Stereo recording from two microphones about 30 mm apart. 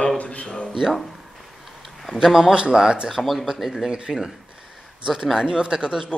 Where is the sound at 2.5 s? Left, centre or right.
Right.